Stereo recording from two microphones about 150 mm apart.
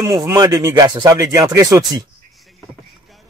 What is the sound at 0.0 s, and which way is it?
Speech, 20° right (ahead or behind).